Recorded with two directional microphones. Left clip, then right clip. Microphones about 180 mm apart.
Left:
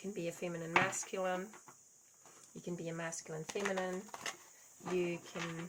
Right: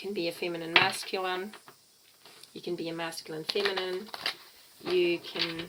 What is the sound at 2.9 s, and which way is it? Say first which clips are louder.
Speech: right 7 dB; 40° right (ahead or behind).